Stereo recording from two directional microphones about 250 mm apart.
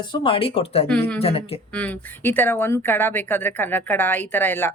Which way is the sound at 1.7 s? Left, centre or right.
Centre.